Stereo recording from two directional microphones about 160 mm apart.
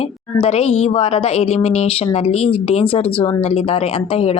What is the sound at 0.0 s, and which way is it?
A woman's voice, 35° left (ahead or behind).